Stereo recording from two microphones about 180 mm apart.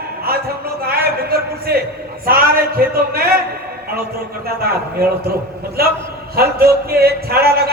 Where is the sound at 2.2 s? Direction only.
55° right (ahead or behind).